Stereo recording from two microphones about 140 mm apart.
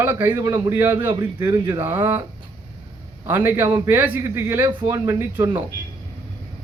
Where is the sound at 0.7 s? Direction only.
15° right (ahead or behind).